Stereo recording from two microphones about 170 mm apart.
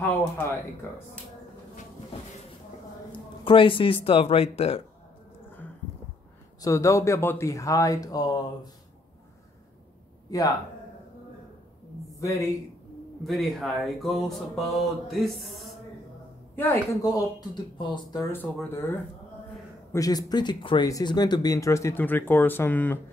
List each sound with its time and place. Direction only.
0.1 s speech: 10° left (ahead or behind)
3.1 s speech: 30° left (ahead or behind)
6.6 s speech: 15° left (ahead or behind)
12.2 s speech: 20° left (ahead or behind)
13.2 s speech: centre (ahead or behind)
17.0 s speech: 25° left (ahead or behind)
18.3 s speech: 10° left (ahead or behind)
19.9 s speech: 20° left (ahead or behind)